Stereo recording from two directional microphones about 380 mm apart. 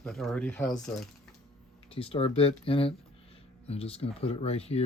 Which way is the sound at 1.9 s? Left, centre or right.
Centre.